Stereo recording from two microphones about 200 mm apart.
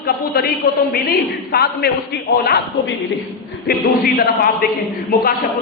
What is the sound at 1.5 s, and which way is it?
A man's voice, 50° left (ahead or behind).